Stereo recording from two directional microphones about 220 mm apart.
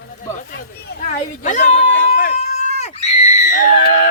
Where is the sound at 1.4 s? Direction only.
35° left (ahead or behind).